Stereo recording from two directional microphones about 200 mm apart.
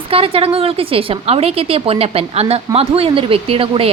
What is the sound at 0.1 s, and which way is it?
Speech, 30° right (ahead or behind).